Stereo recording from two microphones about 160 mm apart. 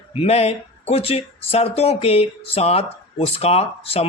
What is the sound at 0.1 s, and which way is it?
Speech, 40° left (ahead or behind).